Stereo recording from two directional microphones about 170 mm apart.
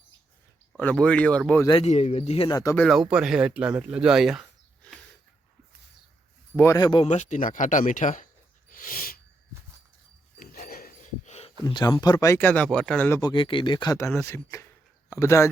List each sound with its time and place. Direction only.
0.8 s speech: 5° left (ahead or behind)
1.8 s speech: 40° left (ahead or behind)
2.5 s speech: 20° left (ahead or behind)
2.8 s speech: centre (ahead or behind)
6.6 s speech: 20° left (ahead or behind)
7.1 s speech: 45° left (ahead or behind)
8.7 s a sound: 55° left (ahead or behind)
10.4 s dog: 60° left (ahead or behind)
11.3 s a sound: 40° left (ahead or behind)
11.6 s speech: 25° left (ahead or behind)
13.2 s speech: 30° left (ahead or behind)
15.1 s speech: 15° left (ahead or behind)